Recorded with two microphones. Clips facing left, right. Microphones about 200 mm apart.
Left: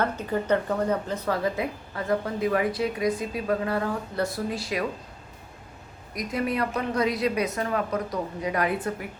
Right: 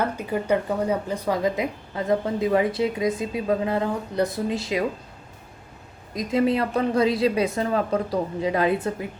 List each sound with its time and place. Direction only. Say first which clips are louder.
0.0 s speech: right 1 dB; 10° right (ahead or behind)
6.1 s speech: right 5 dB; 25° right (ahead or behind)